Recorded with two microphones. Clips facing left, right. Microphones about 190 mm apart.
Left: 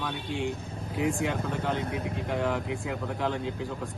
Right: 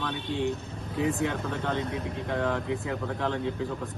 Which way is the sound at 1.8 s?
60° left (ahead or behind).